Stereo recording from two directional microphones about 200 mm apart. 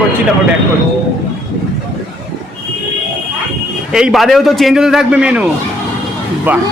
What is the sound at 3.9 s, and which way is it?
A man's voice, centre (ahead or behind).